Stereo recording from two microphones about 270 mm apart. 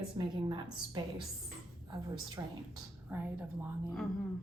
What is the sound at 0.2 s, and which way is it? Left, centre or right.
A woman's voice, centre.